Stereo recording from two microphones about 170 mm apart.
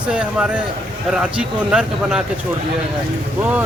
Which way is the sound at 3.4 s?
10° right (ahead or behind).